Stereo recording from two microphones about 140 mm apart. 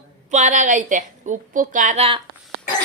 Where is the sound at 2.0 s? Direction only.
40° right (ahead or behind).